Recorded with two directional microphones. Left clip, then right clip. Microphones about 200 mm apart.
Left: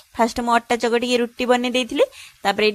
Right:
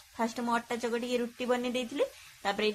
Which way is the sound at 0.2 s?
45° left (ahead or behind).